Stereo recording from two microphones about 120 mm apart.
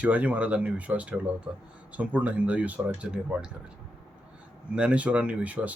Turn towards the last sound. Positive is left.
turn(degrees=-10)  # may be behind; listen again after turning